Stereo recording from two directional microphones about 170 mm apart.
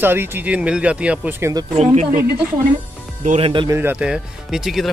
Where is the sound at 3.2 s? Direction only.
35° right (ahead or behind).